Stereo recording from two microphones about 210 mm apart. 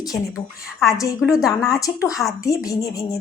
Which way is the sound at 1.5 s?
Centre (ahead or behind).